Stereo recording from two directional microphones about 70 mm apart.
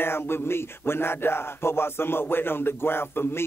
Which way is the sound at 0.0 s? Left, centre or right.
Left.